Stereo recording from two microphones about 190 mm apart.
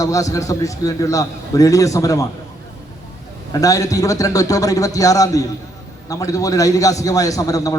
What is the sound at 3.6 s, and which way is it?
A man's voice, 15° left (ahead or behind).